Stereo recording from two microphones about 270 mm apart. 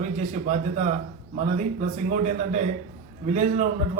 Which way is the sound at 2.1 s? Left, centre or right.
Right.